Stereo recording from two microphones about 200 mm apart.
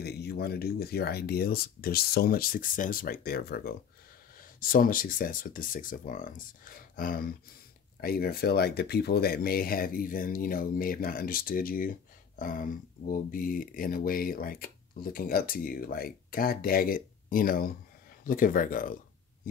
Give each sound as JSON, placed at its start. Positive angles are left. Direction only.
{"t": 0.0, "sound": "speech", "side_deg": 55}